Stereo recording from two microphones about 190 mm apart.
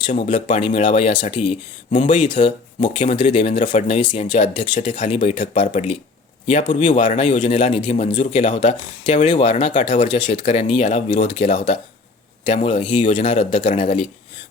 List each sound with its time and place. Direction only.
0.1 s speech: 40° left (ahead or behind)
0.6 s speech: 25° left (ahead or behind)
1.9 s speech: 40° left (ahead or behind)
2.1 s speech: 25° left (ahead or behind)
3.6 s speech: 40° left (ahead or behind)
9.9 s speech: 40° left (ahead or behind)